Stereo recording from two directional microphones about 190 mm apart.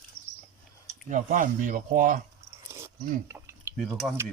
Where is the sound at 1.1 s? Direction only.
45° right (ahead or behind).